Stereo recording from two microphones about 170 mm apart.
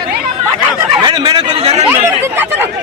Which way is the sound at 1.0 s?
25° right (ahead or behind).